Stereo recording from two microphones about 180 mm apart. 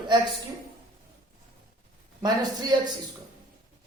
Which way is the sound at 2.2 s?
25° right (ahead or behind).